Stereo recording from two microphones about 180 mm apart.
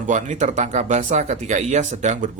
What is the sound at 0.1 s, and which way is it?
A man's voice, 45° right (ahead or behind).